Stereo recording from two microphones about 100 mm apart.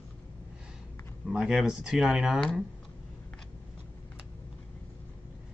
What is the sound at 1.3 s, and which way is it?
Speech, 5° right (ahead or behind).